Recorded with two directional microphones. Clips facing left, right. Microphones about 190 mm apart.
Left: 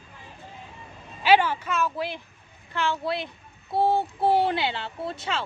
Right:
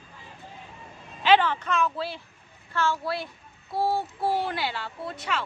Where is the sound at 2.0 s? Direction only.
15° left (ahead or behind).